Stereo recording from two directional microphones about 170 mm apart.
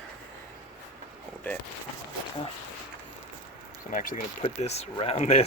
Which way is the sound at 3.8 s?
50° left (ahead or behind).